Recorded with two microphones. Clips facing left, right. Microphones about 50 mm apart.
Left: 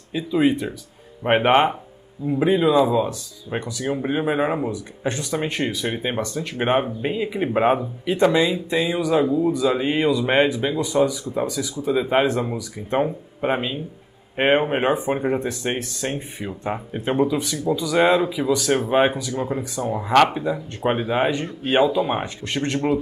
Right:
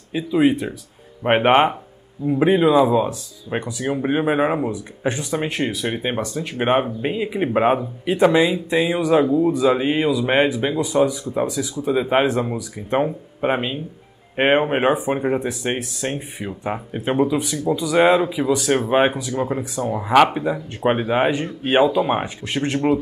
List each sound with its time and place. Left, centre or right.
0.1 s speech: centre
19.9 s speech: centre